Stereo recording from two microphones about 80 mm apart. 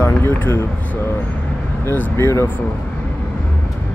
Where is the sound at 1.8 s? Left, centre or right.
Left.